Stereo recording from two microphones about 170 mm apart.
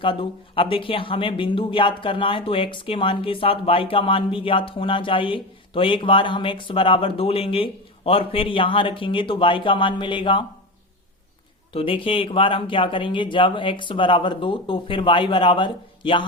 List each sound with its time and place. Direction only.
0.0 s speech: 30° left (ahead or behind)
11.7 s speech: 30° left (ahead or behind)